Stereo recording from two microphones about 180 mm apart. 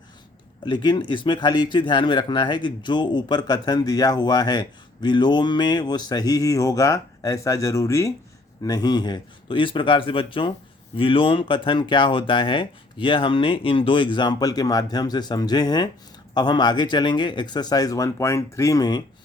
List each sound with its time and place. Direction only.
0.6 s speech: 25° left (ahead or behind)